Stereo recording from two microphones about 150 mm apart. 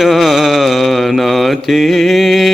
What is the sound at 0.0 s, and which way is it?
Mantra, centre (ahead or behind).